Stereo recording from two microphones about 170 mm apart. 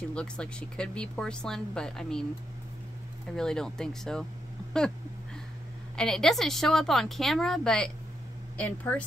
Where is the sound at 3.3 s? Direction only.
5° left (ahead or behind).